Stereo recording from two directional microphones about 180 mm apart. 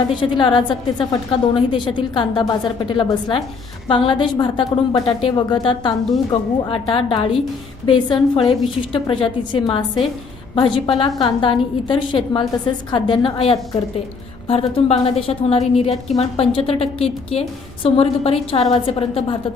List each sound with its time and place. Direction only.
0.2 s a woman's voice: 25° left (ahead or behind)